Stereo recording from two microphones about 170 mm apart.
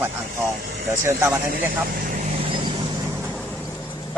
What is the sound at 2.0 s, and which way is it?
Vehicle, 50° right (ahead or behind).